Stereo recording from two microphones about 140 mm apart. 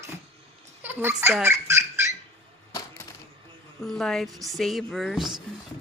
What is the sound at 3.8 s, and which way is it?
Speech, centre (ahead or behind).